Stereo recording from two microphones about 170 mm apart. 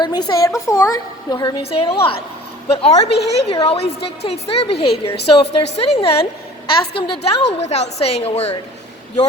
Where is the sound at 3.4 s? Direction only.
30° left (ahead or behind).